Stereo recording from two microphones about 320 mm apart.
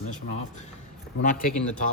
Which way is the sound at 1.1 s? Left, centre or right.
Left.